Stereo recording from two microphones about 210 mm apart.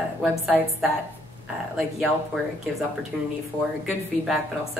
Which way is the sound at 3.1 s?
Centre (ahead or behind).